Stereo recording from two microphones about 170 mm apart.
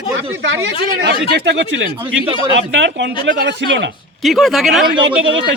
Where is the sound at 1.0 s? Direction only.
80° right.